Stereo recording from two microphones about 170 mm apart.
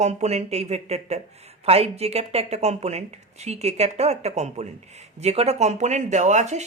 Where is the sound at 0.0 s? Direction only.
40° right (ahead or behind).